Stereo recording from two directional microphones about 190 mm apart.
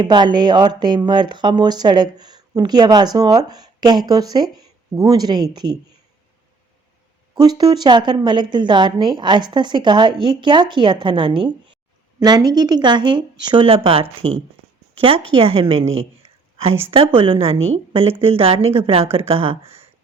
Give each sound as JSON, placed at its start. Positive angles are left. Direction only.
{"t": 0.0, "sound": "speech", "side_deg": -25}
{"t": 7.3, "sound": "speech", "side_deg": -20}
{"t": 16.0, "sound": "a sound", "side_deg": -30}
{"t": 16.9, "sound": "speech", "side_deg": -30}